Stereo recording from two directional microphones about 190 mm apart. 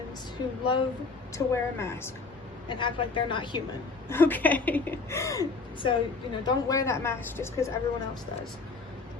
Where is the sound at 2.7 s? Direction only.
25° left (ahead or behind).